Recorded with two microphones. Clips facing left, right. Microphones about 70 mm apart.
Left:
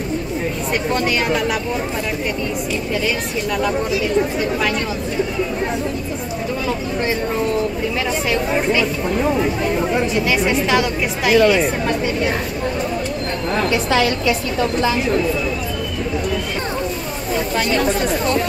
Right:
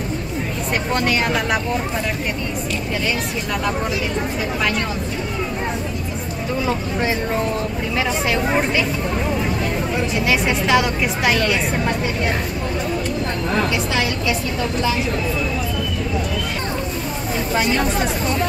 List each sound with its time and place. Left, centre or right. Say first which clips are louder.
0.9 s a woman's voice: even; centre
10.1 s a woman's voice: left 2 dB; centre
13.7 s a woman's voice: left 4 dB; left